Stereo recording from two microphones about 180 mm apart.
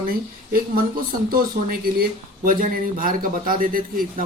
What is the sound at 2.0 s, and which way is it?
Speech, 50° right (ahead or behind).